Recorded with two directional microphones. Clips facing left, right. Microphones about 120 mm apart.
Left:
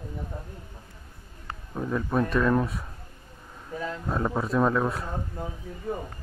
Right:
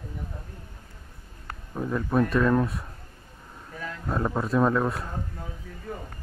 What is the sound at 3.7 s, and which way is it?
Speech, 25° left (ahead or behind).